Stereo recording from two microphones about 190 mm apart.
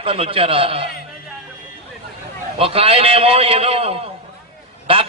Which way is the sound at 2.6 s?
30° right (ahead or behind).